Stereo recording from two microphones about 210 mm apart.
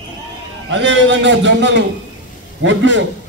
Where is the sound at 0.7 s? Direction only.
60° right (ahead or behind).